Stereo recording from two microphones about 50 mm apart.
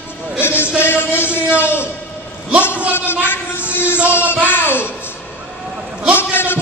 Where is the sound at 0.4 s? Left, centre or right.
Left.